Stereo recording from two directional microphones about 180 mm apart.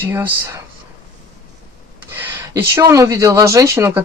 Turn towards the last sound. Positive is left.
turn(degrees=-15)  # may be behind; listen again after turning